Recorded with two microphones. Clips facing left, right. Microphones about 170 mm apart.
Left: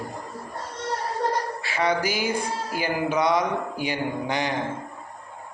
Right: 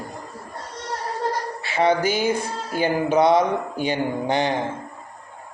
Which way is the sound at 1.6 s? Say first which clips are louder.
Right 6 dB; 25° right (ahead or behind).